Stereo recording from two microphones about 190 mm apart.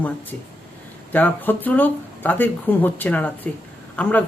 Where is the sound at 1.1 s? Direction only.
10° left (ahead or behind).